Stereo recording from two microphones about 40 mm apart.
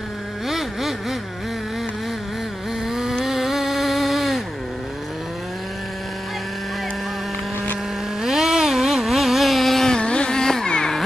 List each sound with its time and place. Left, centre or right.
0.5 s vehicle: centre
2.9 s vehicle: centre
3.3 s a sound: centre
8.2 s vehicle: centre
9.9 s carnatic music: left